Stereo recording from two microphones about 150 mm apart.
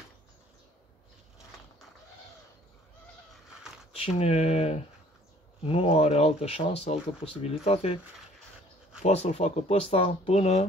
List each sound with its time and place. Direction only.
4.0 s speech: 45° left (ahead or behind)
9.0 s speech: 45° left (ahead or behind)